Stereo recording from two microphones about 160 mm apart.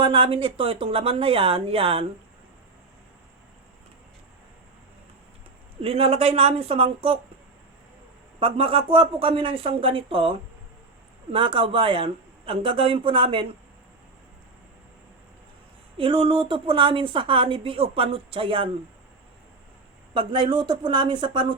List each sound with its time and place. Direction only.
0.0 s a woman's voice: 35° right (ahead or behind)
5.8 s a woman's voice: 40° right (ahead or behind)
8.4 s a woman's voice: 35° right (ahead or behind)
16.0 s a woman's voice: 35° right (ahead or behind)
20.1 s speech: 30° right (ahead or behind)